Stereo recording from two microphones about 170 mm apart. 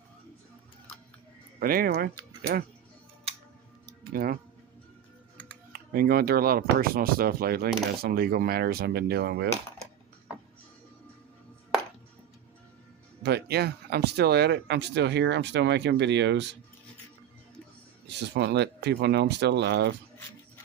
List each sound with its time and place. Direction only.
1.5 s speech: 60° right (ahead or behind)
4.1 s speech: 60° right (ahead or behind)
5.7 s speech: 60° right (ahead or behind)
13.2 s speech: 75° right (ahead or behind); by 16.6 s 90° right
18.1 s speech: 90° right